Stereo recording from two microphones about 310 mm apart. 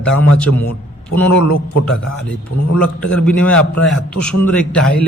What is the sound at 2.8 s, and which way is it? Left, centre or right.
A man's voice, centre.